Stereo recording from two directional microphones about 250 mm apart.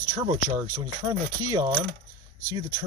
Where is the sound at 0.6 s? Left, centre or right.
Centre.